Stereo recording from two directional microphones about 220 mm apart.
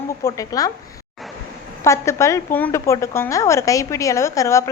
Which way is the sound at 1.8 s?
10° left (ahead or behind).